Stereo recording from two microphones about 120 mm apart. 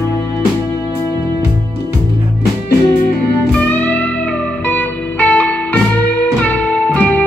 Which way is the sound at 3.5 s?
10° left (ahead or behind).